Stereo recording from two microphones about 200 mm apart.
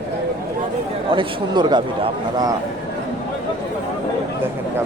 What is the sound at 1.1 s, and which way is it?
A man's voice, 20° right (ahead or behind).